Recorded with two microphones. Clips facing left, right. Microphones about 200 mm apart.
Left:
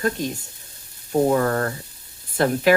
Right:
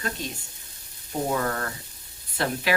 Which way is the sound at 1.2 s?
45° left (ahead or behind).